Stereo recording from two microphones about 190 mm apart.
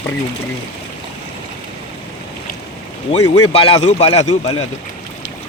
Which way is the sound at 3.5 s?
30° left (ahead or behind).